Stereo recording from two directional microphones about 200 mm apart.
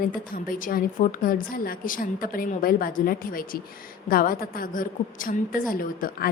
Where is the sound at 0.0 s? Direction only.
45° left (ahead or behind).